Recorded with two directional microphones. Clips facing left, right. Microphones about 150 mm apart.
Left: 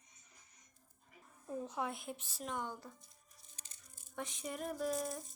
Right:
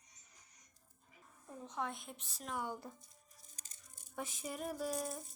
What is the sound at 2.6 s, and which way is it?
Speech, 15° right (ahead or behind).